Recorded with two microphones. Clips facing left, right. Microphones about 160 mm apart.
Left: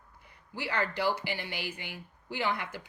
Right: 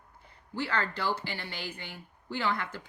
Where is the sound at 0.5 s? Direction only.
15° left (ahead or behind).